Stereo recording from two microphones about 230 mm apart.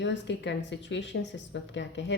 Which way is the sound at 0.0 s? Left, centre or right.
Left.